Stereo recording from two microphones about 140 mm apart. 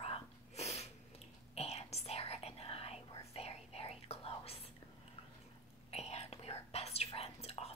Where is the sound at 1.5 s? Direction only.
50° left (ahead or behind).